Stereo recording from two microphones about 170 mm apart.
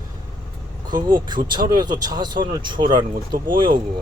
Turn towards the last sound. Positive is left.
turn(degrees=-30)  # may be behind; listen again after turning